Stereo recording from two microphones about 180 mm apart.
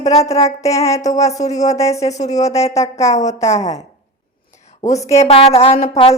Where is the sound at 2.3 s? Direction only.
20° left (ahead or behind).